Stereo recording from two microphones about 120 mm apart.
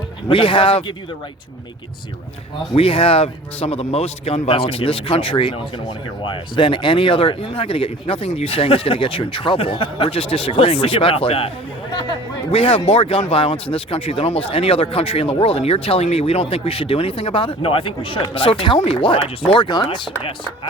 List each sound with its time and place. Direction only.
0.3 s speech: 45° left (ahead or behind)
2.7 s speech: 50° left (ahead or behind)